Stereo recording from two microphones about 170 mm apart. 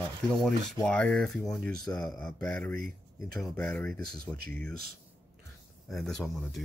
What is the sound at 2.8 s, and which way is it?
Speech, 60° right (ahead or behind).